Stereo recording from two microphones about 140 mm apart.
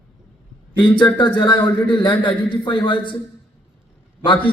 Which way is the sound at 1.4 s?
35° left (ahead or behind).